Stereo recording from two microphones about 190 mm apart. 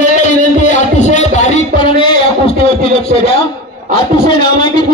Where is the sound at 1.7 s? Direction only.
25° left (ahead or behind).